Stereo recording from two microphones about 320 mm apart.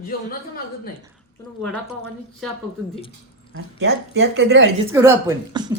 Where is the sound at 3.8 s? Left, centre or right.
Right.